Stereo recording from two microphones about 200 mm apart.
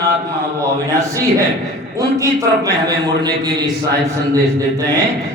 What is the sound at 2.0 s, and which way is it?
A man's voice, 15° right (ahead or behind).